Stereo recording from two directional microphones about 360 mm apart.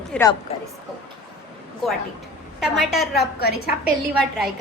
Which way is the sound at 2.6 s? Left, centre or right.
Centre.